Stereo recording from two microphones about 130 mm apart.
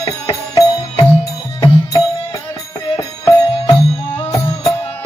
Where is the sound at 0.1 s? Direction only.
25° left (ahead or behind).